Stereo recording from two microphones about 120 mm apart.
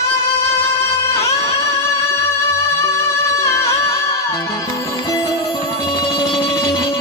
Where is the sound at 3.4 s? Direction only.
25° left (ahead or behind).